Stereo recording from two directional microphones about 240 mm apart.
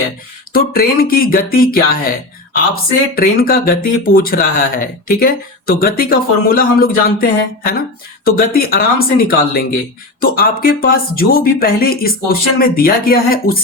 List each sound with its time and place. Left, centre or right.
0.5 s speech: left